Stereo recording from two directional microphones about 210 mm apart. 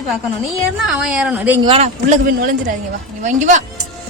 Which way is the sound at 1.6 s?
30° right (ahead or behind).